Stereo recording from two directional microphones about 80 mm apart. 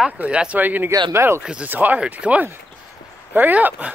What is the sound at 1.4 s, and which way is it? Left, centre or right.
Speech, centre.